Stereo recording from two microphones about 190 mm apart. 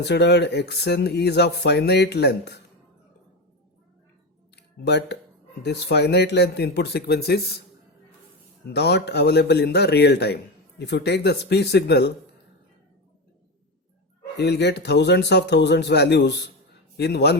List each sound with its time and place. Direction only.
0.0 s speech: 60° left (ahead or behind)
4.5 s a sound: 60° left (ahead or behind)
5.6 s speech: 60° left (ahead or behind)
8.7 s speech: 60° left (ahead or behind)
14.3 s speech: 60° left (ahead or behind)